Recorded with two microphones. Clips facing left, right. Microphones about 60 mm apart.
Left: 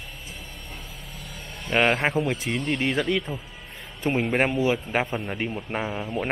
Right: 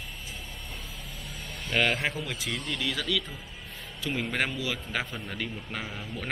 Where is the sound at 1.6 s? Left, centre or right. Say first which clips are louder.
Left 5 dB; left.